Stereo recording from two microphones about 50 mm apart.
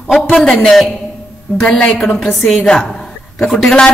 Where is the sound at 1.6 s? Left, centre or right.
Centre.